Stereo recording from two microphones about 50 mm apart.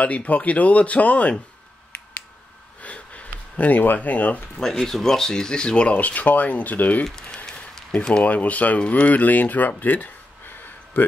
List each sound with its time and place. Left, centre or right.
0.0 s speech: left
2.8 s a sound: left
4.6 s speech: centre
5.9 s speech: left
7.1 s speech: centre
8.1 s speech: left
10.6 s a sound: left